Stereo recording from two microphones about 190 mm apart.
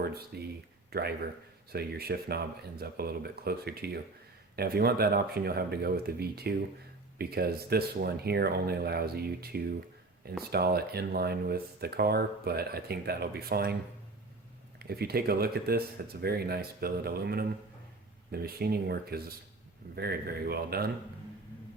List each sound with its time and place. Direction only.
0.0 s speech: 55° right (ahead or behind)
14.8 s speech: 55° right (ahead or behind)